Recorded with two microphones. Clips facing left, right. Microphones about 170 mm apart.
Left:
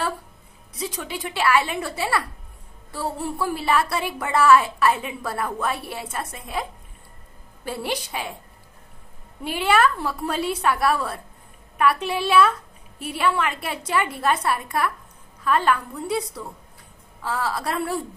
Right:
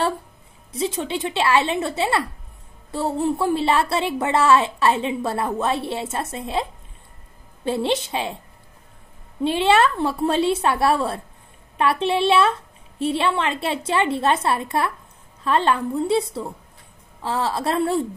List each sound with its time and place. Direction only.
0.7 s a woman's voice: 25° right (ahead or behind)
9.4 s a woman's voice: 25° right (ahead or behind)